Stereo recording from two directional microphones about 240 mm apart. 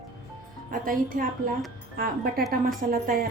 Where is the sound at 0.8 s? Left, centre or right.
Right.